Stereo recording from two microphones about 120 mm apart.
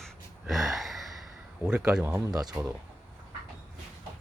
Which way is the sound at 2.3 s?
35° right (ahead or behind).